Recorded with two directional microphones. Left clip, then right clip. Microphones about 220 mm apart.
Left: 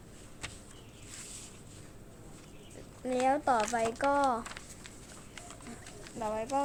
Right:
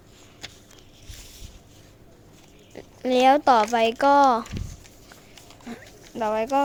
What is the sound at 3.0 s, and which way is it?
Speech, 40° right (ahead or behind).